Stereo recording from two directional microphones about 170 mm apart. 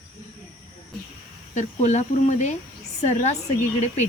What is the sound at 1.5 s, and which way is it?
Speech, 45° left (ahead or behind).